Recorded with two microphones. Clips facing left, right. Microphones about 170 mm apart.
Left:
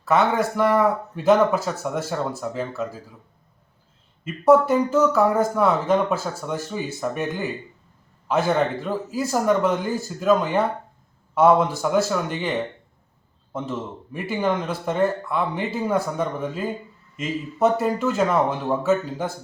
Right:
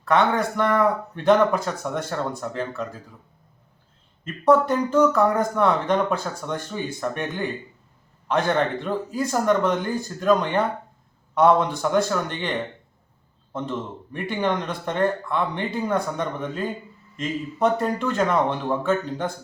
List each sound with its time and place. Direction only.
0.0 s speech: 5° left (ahead or behind)
4.2 s speech: 5° left (ahead or behind)